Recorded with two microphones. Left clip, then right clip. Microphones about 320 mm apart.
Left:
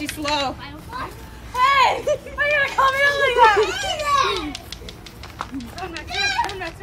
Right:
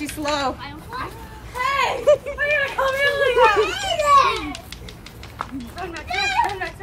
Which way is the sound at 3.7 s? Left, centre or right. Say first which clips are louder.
Right 5 dB; right.